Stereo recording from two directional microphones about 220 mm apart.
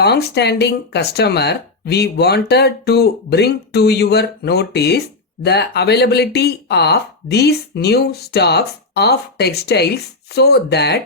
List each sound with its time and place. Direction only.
0.0 s speech: 50° left (ahead or behind)